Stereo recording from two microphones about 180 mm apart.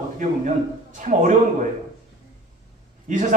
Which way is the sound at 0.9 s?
45° right (ahead or behind).